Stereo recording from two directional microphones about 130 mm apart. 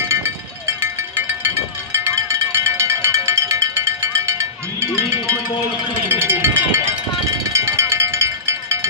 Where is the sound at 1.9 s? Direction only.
20° right (ahead or behind).